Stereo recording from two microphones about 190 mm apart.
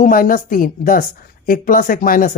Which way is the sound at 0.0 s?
45° left (ahead or behind).